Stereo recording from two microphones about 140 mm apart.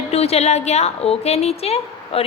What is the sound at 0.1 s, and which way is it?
A woman's voice, 50° left (ahead or behind).